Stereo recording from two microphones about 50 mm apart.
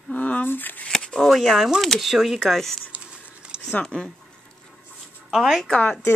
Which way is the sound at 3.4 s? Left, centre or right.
Centre.